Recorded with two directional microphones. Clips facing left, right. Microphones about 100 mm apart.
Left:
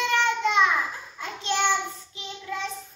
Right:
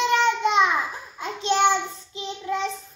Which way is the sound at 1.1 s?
20° right (ahead or behind).